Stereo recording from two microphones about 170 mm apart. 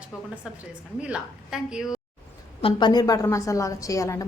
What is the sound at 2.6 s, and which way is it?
A woman's voice, 25° left (ahead or behind).